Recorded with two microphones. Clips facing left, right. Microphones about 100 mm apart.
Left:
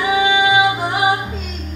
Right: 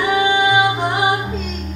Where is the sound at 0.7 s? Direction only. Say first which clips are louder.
Even; 5° left (ahead or behind).